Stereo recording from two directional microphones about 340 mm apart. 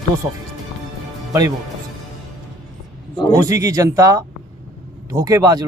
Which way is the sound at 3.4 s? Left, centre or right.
Centre.